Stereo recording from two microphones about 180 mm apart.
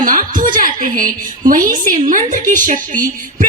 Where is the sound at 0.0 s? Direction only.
50° right (ahead or behind).